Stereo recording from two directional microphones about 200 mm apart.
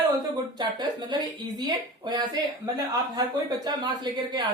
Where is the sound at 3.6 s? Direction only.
20° right (ahead or behind).